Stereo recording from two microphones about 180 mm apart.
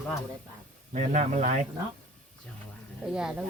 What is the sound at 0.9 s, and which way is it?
Speech, 40° right (ahead or behind).